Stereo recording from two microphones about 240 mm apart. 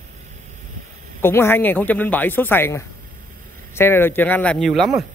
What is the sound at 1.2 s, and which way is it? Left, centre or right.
Speech, centre.